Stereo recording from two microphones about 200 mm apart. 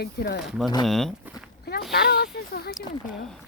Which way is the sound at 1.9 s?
50° left (ahead or behind).